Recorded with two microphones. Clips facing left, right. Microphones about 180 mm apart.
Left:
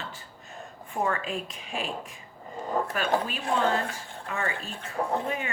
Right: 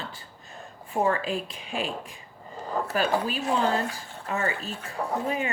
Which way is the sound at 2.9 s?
35° right (ahead or behind).